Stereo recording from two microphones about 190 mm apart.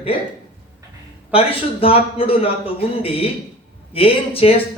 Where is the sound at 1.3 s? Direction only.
30° left (ahead or behind).